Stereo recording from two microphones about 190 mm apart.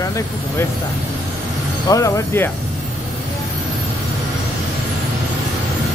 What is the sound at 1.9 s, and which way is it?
Speech, 15° left (ahead or behind).